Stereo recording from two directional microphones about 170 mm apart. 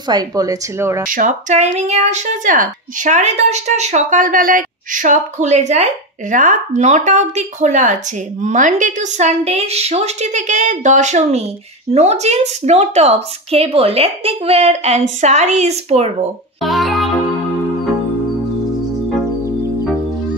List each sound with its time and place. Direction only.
0.1 s speech: 20° right (ahead or behind)
1.1 s speech: 45° right (ahead or behind)
16.6 s music: centre (ahead or behind)